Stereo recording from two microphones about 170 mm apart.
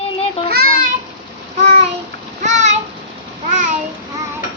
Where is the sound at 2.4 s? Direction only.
45° right (ahead or behind).